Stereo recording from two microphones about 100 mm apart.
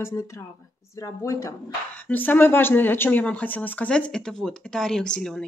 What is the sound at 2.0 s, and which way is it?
Speech, 15° left (ahead or behind).